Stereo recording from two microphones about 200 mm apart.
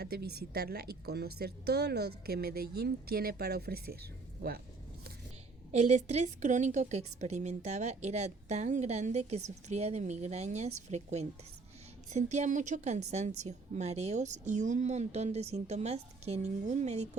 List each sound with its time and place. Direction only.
0.0 s speech: 50° right (ahead or behind)
5.7 s a woman's voice: 35° right (ahead or behind)